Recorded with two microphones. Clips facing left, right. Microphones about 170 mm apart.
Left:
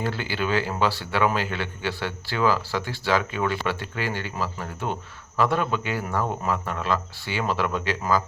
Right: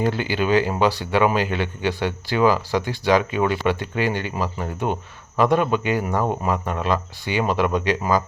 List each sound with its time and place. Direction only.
0.0 s speech: 15° right (ahead or behind)